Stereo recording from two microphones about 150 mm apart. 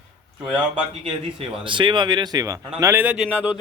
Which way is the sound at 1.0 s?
35° right (ahead or behind).